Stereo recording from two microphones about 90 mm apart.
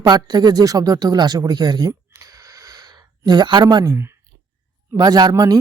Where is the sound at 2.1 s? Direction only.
40° right (ahead or behind).